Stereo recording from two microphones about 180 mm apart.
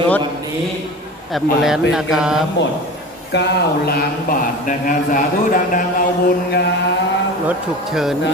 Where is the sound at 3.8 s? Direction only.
55° left (ahead or behind).